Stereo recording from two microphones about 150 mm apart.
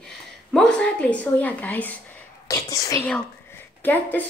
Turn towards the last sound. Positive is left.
turn(degrees=10)  # may be behind; listen again after turning